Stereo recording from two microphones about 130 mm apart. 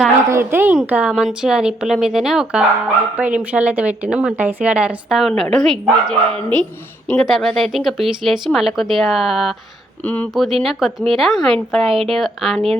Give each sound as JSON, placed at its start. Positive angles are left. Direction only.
{"t": 0.3, "sound": "a woman's voice", "side_deg": -20}
{"t": 10.0, "sound": "speech", "side_deg": 10}
{"t": 10.3, "sound": "speech", "side_deg": 0}